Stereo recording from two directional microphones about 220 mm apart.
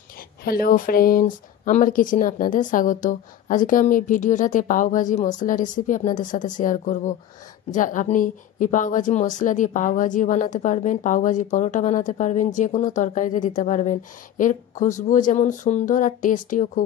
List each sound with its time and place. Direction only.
0.4 s a woman's voice: 40° left (ahead or behind)